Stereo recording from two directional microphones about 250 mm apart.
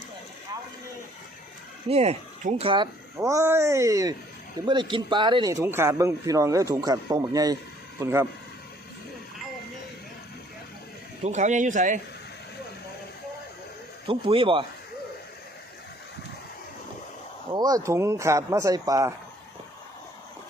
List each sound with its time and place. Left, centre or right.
1.9 s a man's voice: right
11.2 s speech: right
14.1 s speech: right
17.5 s a man's voice: centre